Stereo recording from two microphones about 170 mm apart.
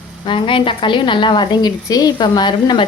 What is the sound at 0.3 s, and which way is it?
A woman's voice, 30° left (ahead or behind).